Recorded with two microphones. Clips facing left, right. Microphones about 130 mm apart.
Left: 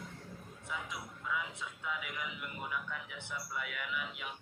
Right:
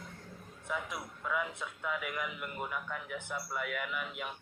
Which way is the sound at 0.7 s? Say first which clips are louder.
Right 5 dB; 55° right (ahead or behind).